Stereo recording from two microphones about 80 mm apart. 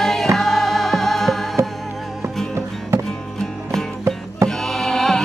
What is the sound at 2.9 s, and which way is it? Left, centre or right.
Music, right.